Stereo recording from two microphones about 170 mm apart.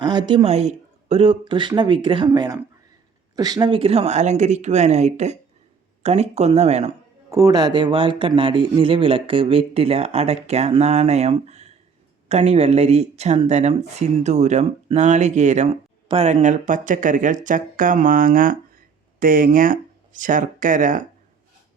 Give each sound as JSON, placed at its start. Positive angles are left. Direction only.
{"t": 0.0, "sound": "speech", "side_deg": -25}
{"t": 7.3, "sound": "speech", "side_deg": -20}